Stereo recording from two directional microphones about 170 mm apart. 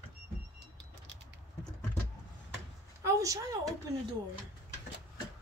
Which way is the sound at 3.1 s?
20° right (ahead or behind).